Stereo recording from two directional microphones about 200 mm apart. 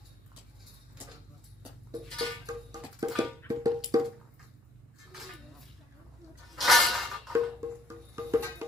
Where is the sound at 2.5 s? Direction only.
20° right (ahead or behind).